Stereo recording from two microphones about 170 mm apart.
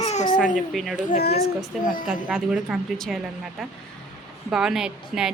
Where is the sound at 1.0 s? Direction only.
60° left (ahead or behind).